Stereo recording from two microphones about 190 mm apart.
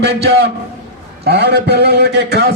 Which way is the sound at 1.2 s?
60° right (ahead or behind).